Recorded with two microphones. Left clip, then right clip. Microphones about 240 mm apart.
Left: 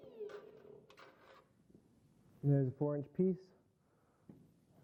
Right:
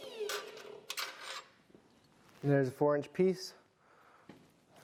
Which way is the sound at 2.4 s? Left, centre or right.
Centre.